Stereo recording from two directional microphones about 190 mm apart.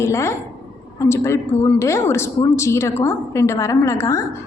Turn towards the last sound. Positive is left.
turn(degrees=15)  # may be behind; listen again after turning